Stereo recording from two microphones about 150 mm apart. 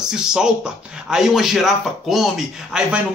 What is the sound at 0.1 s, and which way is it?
A man's voice, 5° right (ahead or behind).